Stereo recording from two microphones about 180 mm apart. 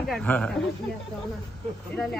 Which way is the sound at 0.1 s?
5° left (ahead or behind).